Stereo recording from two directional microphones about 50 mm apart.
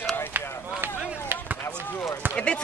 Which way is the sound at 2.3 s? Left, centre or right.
Left.